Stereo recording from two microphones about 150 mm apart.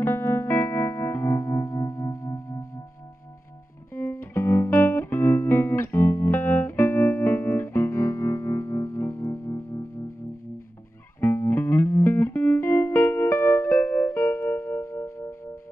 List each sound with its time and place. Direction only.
0.0 s music: 15° left (ahead or behind)
3.9 s music: 15° left (ahead or behind)
11.1 s music: 15° left (ahead or behind)